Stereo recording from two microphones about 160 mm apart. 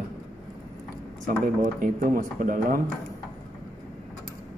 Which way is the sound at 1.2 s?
55° right (ahead or behind).